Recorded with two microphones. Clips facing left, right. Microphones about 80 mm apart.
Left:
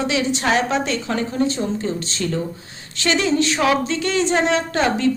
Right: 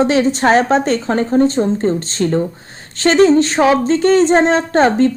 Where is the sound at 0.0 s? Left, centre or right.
Right.